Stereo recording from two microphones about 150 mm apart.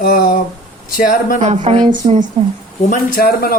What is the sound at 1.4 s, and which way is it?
Speech, 50° right (ahead or behind).